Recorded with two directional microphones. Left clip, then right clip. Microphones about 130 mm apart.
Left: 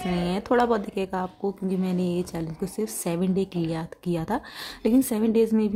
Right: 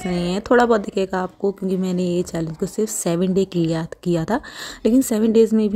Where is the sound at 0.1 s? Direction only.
30° right (ahead or behind).